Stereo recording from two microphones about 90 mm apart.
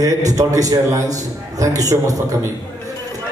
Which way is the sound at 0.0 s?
40° right (ahead or behind).